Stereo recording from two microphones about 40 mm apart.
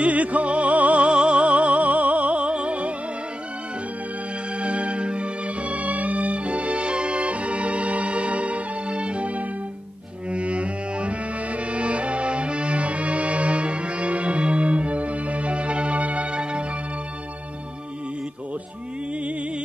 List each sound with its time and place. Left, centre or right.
0.0 s music: right
4.6 s music: right